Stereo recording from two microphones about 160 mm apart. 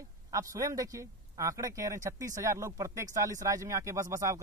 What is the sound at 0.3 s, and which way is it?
Speech, 20° right (ahead or behind).